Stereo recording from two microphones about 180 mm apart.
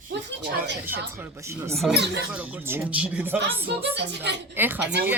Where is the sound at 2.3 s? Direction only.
10° right (ahead or behind).